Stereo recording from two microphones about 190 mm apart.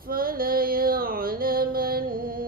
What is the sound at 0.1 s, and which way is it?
Music, 50° right (ahead or behind).